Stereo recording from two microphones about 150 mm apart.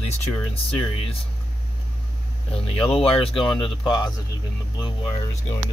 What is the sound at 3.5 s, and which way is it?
Speech, 35° left (ahead or behind).